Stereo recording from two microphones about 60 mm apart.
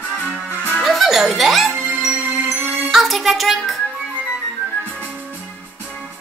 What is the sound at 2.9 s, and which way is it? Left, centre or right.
Music, centre.